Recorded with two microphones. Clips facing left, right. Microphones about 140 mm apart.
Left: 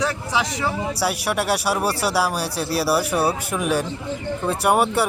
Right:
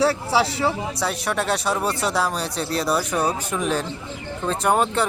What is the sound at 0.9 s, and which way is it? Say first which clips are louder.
Speech: left 2 dB; 10° left (ahead or behind).